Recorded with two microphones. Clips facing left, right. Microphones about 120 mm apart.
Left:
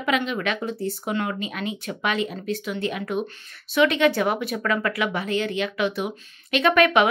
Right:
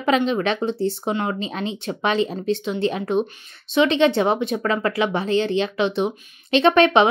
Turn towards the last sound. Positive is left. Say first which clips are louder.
# right 3 dB
turn(degrees=-30)  # may be behind; listen again after turning